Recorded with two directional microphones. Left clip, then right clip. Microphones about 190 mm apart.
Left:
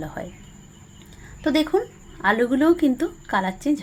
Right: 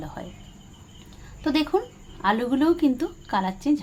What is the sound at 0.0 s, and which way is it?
Speech, 15° left (ahead or behind).